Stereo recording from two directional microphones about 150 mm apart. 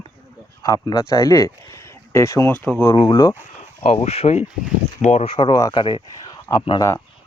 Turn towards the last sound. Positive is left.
turn(degrees=25)  # may be behind; listen again after turning